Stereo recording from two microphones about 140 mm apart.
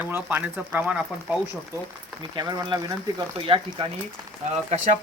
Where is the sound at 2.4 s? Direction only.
30° right (ahead or behind).